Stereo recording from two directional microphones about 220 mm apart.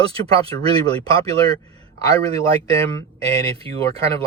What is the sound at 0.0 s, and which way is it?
Speech, 15° left (ahead or behind).